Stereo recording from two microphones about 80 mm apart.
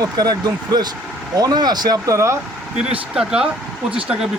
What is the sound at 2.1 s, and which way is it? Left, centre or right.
Speech, right.